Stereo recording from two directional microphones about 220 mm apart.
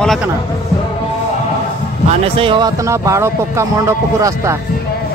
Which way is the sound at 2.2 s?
25° right (ahead or behind).